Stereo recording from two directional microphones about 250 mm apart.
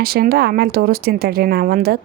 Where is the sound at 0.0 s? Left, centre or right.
Right.